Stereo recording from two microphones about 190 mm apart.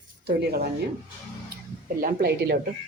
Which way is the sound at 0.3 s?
55° right (ahead or behind).